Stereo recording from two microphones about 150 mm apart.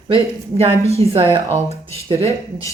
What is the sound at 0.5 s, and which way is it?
Speech, 40° right (ahead or behind).